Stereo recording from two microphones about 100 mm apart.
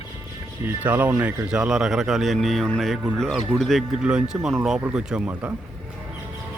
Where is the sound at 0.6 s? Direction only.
20° right (ahead or behind).